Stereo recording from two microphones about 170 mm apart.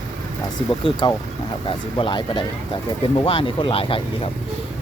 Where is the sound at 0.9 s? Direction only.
30° left (ahead or behind).